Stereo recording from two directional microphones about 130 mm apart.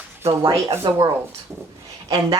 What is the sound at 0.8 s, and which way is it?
Speech, 35° right (ahead or behind).